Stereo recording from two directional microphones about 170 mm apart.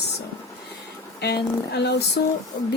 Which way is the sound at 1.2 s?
75° left (ahead or behind).